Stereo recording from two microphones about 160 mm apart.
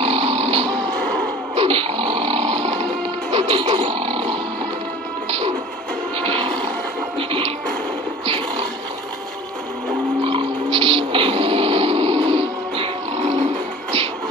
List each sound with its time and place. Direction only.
0.0 s music: 40° right (ahead or behind)
6.1 s music: 35° right (ahead or behind)
10.2 s music: 35° right (ahead or behind)